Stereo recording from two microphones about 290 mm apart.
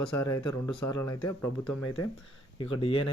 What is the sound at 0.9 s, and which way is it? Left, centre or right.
Speech, left.